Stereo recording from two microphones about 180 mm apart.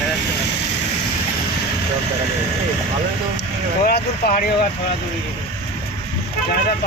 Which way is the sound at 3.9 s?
55° left (ahead or behind).